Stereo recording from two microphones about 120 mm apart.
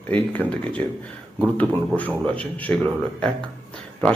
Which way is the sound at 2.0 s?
10° left (ahead or behind).